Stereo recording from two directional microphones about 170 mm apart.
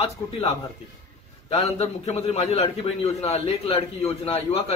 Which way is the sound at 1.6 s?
40° left (ahead or behind).